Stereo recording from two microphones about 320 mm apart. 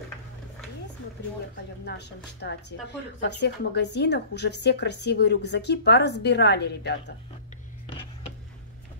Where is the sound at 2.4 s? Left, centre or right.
Left.